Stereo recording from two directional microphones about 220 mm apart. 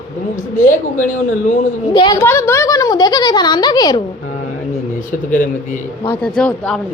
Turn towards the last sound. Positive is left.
turn(degrees=5)  # may be behind; listen again after turning